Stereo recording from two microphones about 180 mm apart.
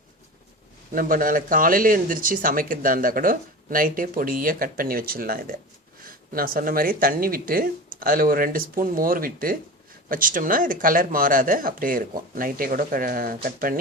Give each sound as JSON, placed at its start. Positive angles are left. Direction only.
{"t": 0.9, "sound": "speech", "side_deg": -50}